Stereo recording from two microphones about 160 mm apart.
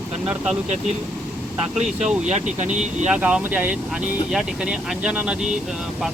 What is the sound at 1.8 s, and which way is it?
Speech, 50° right (ahead or behind).